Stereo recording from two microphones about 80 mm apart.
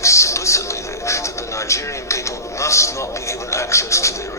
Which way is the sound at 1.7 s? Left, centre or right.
Left.